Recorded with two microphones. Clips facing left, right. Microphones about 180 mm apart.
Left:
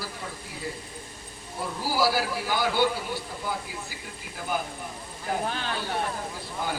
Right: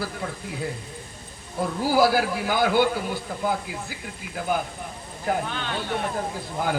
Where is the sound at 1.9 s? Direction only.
55° right (ahead or behind).